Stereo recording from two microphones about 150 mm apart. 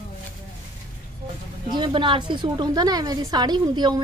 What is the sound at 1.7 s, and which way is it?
Speech, 30° right (ahead or behind).